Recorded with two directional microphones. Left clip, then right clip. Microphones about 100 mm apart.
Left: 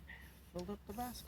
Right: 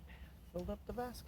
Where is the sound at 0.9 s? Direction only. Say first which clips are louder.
Right 1 dB; 90° right.